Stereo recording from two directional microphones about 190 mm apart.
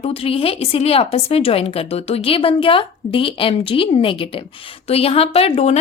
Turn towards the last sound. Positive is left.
turn(degrees=35)  # may be behind; listen again after turning